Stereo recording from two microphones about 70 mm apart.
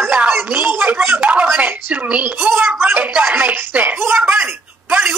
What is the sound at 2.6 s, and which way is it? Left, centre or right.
Speech, right.